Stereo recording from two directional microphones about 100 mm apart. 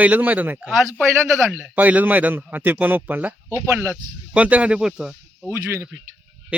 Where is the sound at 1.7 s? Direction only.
15° right (ahead or behind).